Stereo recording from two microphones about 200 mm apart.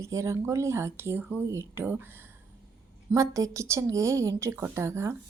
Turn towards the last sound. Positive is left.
turn(degrees=-15)  # may be behind; listen again after turning